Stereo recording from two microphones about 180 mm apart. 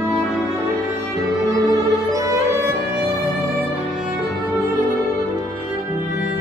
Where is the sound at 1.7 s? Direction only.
20° right (ahead or behind).